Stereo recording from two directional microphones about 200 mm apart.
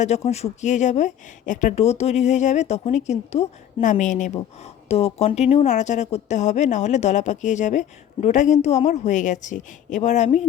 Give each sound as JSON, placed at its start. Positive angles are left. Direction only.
{"t": 0.3, "sound": "speech", "side_deg": 35}